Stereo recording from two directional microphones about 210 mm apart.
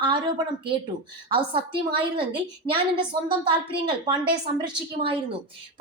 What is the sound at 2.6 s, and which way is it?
Speech, 25° right (ahead or behind).